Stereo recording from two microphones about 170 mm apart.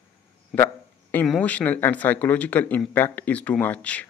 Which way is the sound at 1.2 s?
5° left (ahead or behind).